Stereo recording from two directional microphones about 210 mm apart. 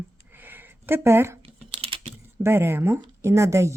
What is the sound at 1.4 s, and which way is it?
Typing, 25° right (ahead or behind).